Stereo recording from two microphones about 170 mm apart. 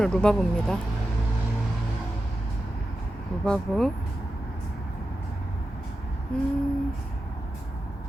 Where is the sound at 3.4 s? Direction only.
5° left (ahead or behind).